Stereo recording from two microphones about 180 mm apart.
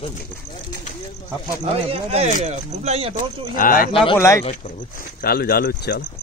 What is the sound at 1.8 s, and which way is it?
Speech, 35° right (ahead or behind).